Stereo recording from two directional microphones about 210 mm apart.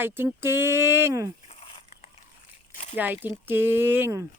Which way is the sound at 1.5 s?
25° left (ahead or behind).